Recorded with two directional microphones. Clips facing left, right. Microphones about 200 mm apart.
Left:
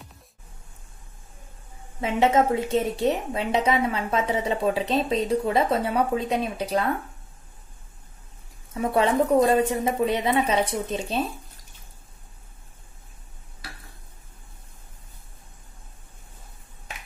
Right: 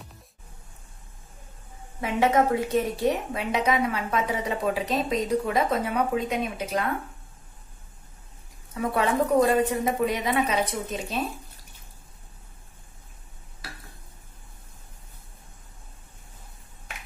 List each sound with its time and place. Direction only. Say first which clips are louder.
2.0 s a woman's voice: left 1 dB; 25° left (ahead or behind)
8.7 s a woman's voice: left 3 dB; 25° left (ahead or behind)